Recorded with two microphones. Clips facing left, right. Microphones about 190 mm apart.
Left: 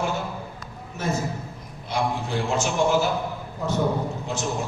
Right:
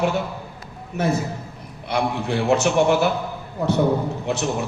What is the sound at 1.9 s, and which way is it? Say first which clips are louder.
A man's voice: right 3 dB; 65° right (ahead or behind).